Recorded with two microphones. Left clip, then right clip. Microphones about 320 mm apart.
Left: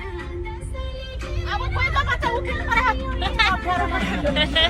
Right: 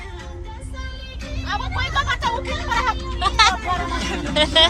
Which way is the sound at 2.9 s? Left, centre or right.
Right.